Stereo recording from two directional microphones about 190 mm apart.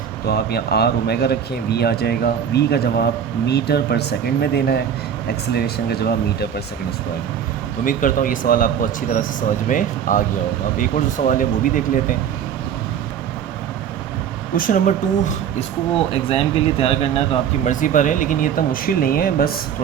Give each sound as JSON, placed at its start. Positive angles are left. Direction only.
{"t": 0.3, "sound": "speech", "side_deg": 55}
{"t": 7.9, "sound": "speech", "side_deg": 45}
{"t": 11.3, "sound": "speech", "side_deg": 45}
{"t": 14.5, "sound": "speech", "side_deg": 45}
{"t": 16.3, "sound": "speech", "side_deg": 30}
{"t": 17.7, "sound": "speech", "side_deg": 45}